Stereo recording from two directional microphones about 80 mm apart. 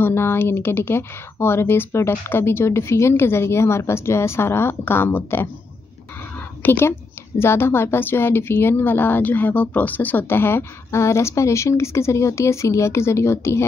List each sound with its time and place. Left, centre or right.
0.0 s a woman's voice: left
6.6 s a woman's voice: left